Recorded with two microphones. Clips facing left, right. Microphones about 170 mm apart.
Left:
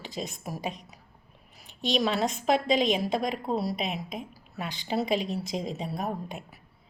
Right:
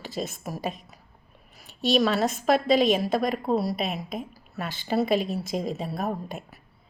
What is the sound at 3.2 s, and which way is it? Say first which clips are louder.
Speech: right 4 dB; 55° right (ahead or behind).